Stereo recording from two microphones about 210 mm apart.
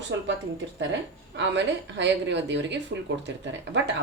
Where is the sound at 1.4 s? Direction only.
60° right (ahead or behind).